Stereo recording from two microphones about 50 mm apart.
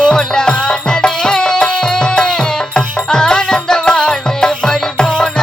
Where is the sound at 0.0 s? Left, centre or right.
Centre.